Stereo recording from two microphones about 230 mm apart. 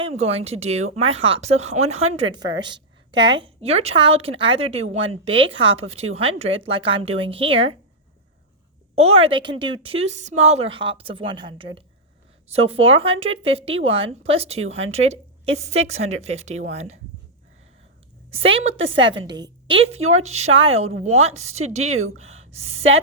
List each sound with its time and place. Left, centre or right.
0.0 s a woman's voice: right
9.0 s a woman's voice: right
18.3 s a woman's voice: right
22.2 s a sound: right
22.5 s a woman's voice: right